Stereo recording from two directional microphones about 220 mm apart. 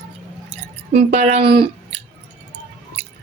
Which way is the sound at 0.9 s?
30° right (ahead or behind).